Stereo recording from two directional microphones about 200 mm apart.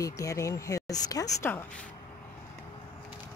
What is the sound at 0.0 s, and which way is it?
Speech, 15° left (ahead or behind).